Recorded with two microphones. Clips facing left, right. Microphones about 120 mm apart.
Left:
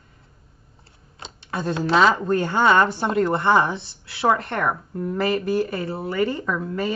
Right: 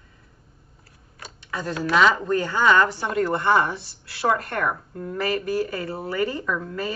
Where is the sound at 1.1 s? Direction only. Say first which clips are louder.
Left 3 dB; 25° left (ahead or behind).